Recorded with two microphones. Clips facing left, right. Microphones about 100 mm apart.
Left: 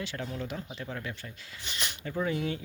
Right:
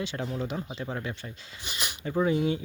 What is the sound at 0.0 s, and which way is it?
Speech, 25° right (ahead or behind).